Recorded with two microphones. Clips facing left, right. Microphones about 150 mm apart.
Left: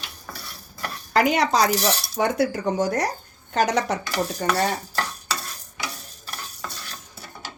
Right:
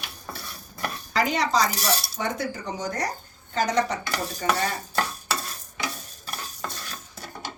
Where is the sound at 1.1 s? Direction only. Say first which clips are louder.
Left 4 dB; 65° left (ahead or behind).